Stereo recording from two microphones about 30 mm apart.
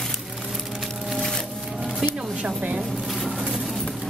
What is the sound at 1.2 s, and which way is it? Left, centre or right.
Music, centre.